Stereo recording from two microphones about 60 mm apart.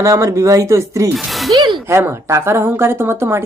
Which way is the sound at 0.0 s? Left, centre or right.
Right.